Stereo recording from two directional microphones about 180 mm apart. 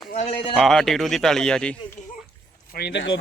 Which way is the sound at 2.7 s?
70° left (ahead or behind).